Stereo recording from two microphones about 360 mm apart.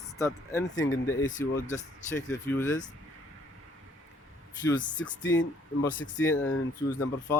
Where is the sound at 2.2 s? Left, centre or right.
Centre.